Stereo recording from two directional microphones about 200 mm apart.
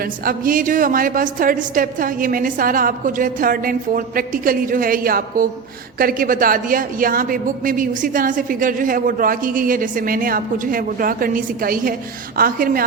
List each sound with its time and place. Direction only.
0.0 s a woman's voice: 45° right (ahead or behind)